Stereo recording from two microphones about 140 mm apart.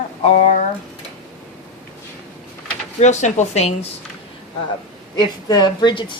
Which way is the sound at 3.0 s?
60° left (ahead or behind).